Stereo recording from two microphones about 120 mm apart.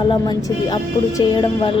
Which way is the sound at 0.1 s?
35° left (ahead or behind).